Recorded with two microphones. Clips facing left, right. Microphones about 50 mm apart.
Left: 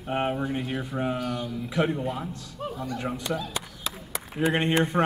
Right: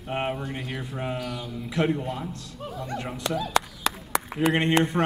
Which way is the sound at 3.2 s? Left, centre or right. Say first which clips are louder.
Right 3 dB; right.